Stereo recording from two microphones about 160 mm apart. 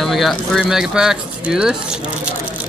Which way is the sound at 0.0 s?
Centre (ahead or behind).